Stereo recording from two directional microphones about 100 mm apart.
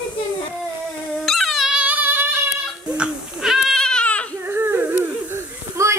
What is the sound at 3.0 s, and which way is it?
Baby cry, centre (ahead or behind).